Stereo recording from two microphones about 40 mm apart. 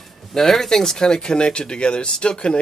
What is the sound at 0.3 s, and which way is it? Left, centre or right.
A man's voice, centre.